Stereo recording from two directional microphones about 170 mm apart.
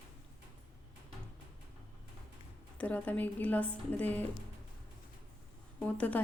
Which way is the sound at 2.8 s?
10° left (ahead or behind).